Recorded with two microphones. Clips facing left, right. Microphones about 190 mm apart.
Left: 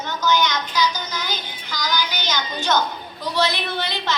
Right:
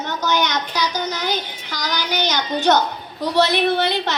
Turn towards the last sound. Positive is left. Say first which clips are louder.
# right 6 dB
turn(degrees=-65)  # may be behind; listen again after turning